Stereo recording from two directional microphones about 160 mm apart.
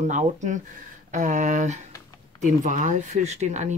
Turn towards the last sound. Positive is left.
turn(degrees=-45)  # may be behind; listen again after turning